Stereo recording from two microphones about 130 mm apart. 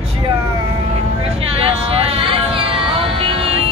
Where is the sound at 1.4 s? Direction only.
45° right (ahead or behind).